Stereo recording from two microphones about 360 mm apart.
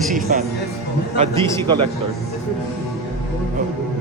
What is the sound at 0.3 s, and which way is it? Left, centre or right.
Speech, right.